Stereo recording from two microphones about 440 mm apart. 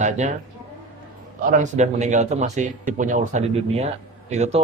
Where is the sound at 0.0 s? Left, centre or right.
Centre.